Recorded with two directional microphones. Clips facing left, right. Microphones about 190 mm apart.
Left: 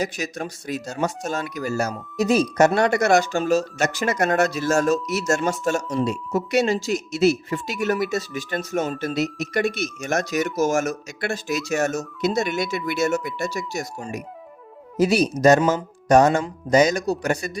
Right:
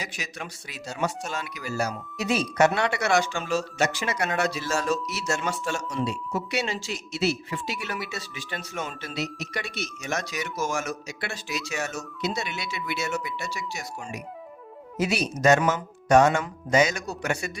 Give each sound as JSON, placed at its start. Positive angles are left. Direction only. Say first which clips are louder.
{"t": 0.0, "sound": "speech", "louder": "left 10 dB", "side_deg": 45}